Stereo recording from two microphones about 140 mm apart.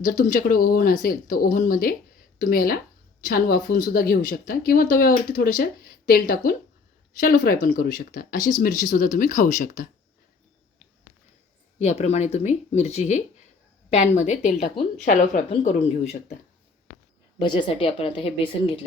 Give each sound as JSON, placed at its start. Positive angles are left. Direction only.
{"t": 0.0, "sound": "speech", "side_deg": 80}
{"t": 11.8, "sound": "speech", "side_deg": 50}
{"t": 15.0, "sound": "a woman's voice", "side_deg": 65}
{"t": 15.4, "sound": "speech", "side_deg": 50}
{"t": 17.4, "sound": "speech", "side_deg": 35}